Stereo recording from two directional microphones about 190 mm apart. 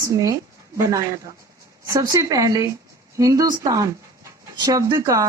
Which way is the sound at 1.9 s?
20° right (ahead or behind).